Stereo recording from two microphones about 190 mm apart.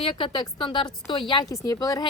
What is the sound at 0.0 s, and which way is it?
A woman's voice, 30° left (ahead or behind).